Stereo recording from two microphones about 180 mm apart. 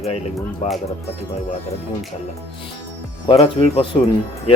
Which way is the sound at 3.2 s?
35° left (ahead or behind).